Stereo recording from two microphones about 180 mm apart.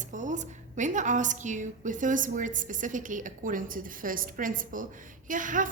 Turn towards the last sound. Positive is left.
turn(degrees=-45)  # may be behind; listen again after turning